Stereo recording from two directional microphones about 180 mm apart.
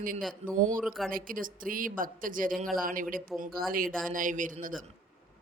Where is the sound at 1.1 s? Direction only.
50° right (ahead or behind).